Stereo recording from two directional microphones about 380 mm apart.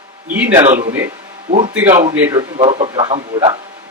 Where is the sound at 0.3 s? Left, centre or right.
Centre.